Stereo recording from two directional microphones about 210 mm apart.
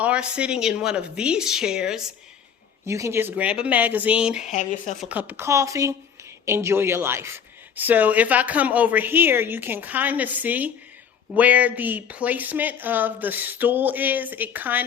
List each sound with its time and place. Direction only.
0.0 s a woman's voice: 5° right (ahead or behind)
4.4 s speech: 35° left (ahead or behind)
4.9 s speech: 5° right (ahead or behind)